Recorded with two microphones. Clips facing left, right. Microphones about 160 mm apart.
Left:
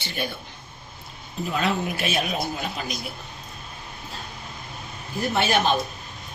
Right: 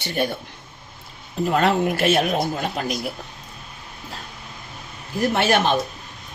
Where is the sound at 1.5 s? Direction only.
60° right (ahead or behind).